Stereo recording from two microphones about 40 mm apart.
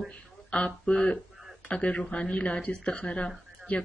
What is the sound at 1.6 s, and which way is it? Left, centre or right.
Speech, left.